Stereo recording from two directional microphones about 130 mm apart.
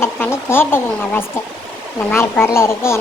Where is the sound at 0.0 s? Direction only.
20° left (ahead or behind).